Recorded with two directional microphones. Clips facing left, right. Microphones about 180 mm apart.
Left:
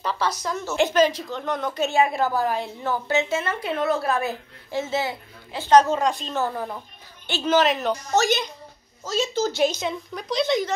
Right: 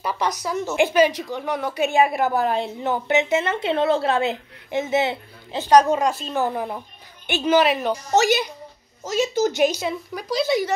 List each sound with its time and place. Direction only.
0.0 s a woman's voice: 15° right (ahead or behind)
5.7 s a woman's voice: 10° right (ahead or behind)